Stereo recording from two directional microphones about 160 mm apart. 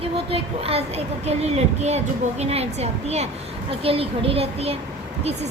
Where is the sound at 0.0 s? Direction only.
35° right (ahead or behind).